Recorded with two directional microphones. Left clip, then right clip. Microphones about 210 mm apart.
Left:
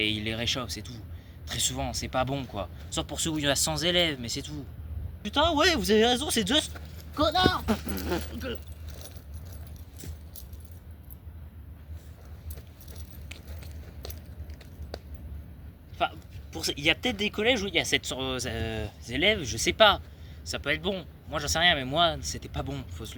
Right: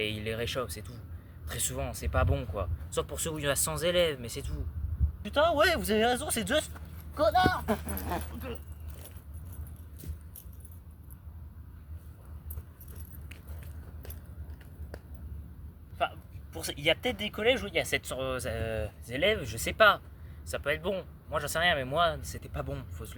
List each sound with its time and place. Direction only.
0.0 s speech: 20° right (ahead or behind)
16.0 s speech: 15° right (ahead or behind)